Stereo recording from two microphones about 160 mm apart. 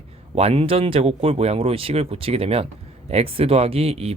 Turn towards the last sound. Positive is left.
turn(degrees=-40)  # may be behind; listen again after turning